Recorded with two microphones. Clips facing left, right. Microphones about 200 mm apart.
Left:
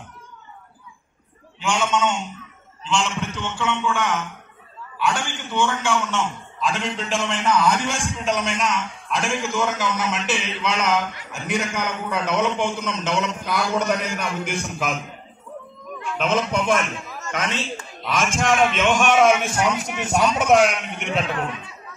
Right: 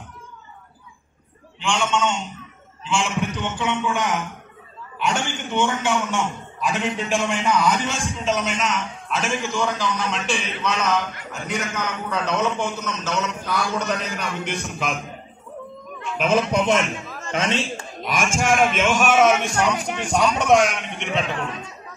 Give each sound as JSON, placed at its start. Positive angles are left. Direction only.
{"t": 1.7, "sound": "a man's voice", "side_deg": 5}
{"t": 2.8, "sound": "a man's voice", "side_deg": -5}
{"t": 16.1, "sound": "a sound", "side_deg": -10}
{"t": 16.5, "sound": "a man's voice", "side_deg": -20}
{"t": 17.2, "sound": "a sound", "side_deg": -25}
{"t": 18.0, "sound": "a man's voice", "side_deg": -15}
{"t": 21.5, "sound": "speech", "side_deg": -40}